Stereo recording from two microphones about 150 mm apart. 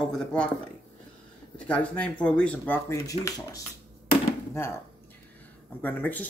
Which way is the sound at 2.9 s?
25° left (ahead or behind).